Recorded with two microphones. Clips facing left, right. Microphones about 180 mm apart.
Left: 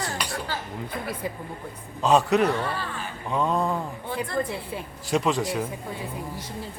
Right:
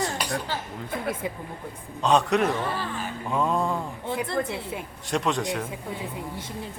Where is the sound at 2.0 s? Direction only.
5° left (ahead or behind).